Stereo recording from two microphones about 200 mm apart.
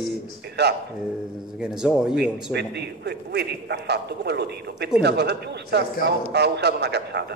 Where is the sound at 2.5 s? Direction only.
55° right (ahead or behind).